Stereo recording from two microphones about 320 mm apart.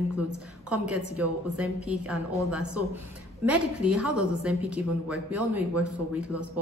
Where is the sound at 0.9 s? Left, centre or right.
Right.